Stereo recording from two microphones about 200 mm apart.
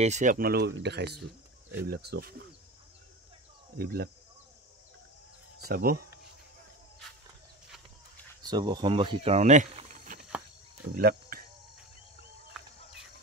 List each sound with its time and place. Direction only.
0.0 s speech: 35° right (ahead or behind); by 2.4 s 55° right (ahead or behind)
3.7 s speech: 50° right (ahead or behind)
5.6 s speech: 50° right (ahead or behind)
8.4 s speech: 20° right (ahead or behind); by 10.2 s 40° right (ahead or behind)
11.0 s cricket: 50° right (ahead or behind)